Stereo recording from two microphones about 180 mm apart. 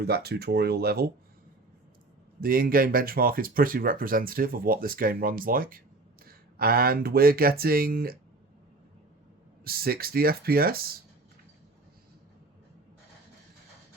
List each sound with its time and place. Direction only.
0.0 s speech: 60° right (ahead or behind)
2.4 s speech: 55° right (ahead or behind)
9.6 s speech: 55° right (ahead or behind)